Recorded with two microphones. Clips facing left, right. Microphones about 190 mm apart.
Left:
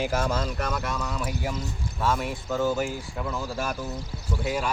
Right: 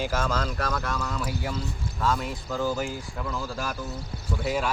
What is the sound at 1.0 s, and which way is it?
Speech, 5° left (ahead or behind).